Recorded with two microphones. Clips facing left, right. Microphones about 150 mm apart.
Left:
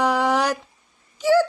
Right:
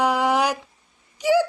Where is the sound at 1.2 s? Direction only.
15° right (ahead or behind).